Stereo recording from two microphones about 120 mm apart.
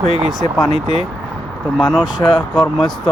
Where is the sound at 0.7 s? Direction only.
50° left (ahead or behind).